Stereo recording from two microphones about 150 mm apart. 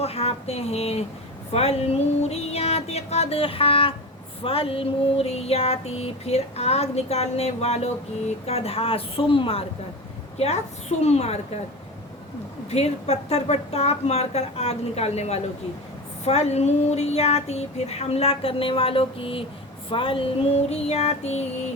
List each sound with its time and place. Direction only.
0.0 s a woman's voice: 40° left (ahead or behind)
1.5 s female singing: 45° left (ahead or behind)
8.4 s speech: 40° left (ahead or behind)
10.3 s female singing: 45° left (ahead or behind)
12.7 s female singing: 45° left (ahead or behind)